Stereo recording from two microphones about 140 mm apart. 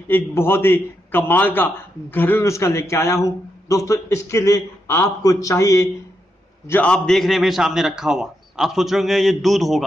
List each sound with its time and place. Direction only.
0.1 s a man's voice: 15° left (ahead or behind)
6.7 s a man's voice: 10° left (ahead or behind)